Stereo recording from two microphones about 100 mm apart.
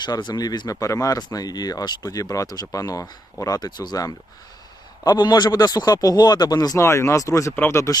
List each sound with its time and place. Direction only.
0.0 s speech: 45° left (ahead or behind)
6.8 s speech: 30° left (ahead or behind)